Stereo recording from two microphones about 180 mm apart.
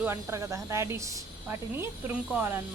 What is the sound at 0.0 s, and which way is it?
Speech, 15° right (ahead or behind).